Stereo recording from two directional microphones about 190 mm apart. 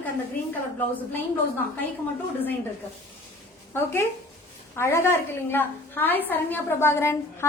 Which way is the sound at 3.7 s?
10° left (ahead or behind).